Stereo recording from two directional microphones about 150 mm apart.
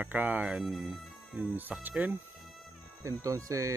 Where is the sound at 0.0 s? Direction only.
10° right (ahead or behind).